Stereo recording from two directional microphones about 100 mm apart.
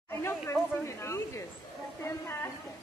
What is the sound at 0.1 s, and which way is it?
A woman's voice, 25° left (ahead or behind).